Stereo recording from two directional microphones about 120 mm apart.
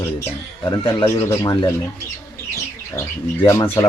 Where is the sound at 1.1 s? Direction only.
20° left (ahead or behind).